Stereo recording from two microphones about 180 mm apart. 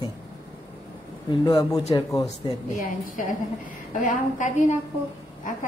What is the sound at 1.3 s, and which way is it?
Speech, 20° left (ahead or behind).